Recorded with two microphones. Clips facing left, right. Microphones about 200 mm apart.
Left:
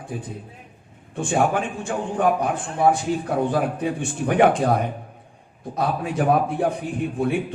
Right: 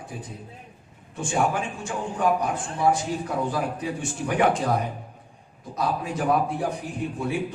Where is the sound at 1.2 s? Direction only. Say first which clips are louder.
Left 4 dB; 55° left (ahead or behind).